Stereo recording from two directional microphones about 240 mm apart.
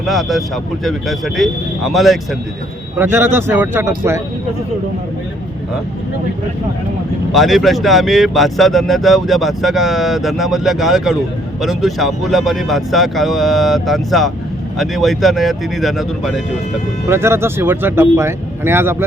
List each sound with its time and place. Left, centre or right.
0.0 s speech: centre
7.3 s speech: centre